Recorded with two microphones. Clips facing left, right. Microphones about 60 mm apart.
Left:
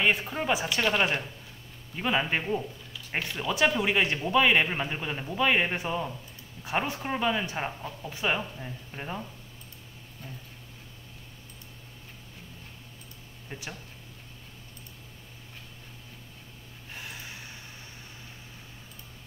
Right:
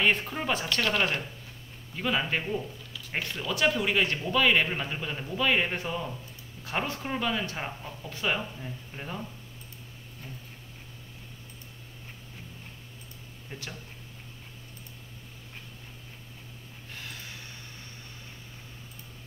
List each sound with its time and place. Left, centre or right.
0.0 s speech: centre
13.5 s speech: centre
16.9 s a sound: centre